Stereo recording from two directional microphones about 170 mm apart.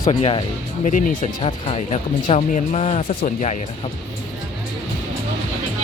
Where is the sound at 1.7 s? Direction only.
35° left (ahead or behind).